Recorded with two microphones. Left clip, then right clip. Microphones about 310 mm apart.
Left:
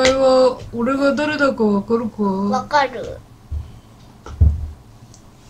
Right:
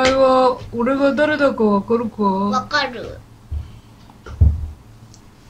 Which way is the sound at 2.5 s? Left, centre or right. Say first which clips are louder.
Left 2 dB; left.